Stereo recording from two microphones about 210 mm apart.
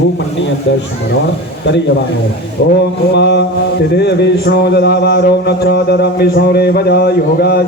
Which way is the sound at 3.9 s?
50° left (ahead or behind).